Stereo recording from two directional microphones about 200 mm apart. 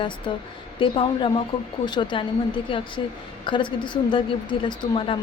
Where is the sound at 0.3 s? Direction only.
25° left (ahead or behind).